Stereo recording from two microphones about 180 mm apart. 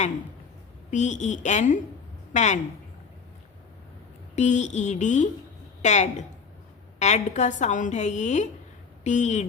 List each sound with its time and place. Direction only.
0.9 s speech: 40° left (ahead or behind)
4.4 s speech: 40° left (ahead or behind)